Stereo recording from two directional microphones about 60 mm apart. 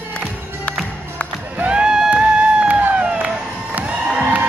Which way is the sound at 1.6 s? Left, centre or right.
Centre.